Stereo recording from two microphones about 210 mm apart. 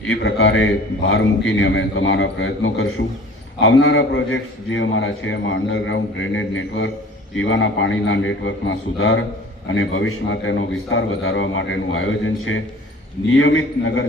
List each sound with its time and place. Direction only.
0.1 s a man's voice: 60° left (ahead or behind)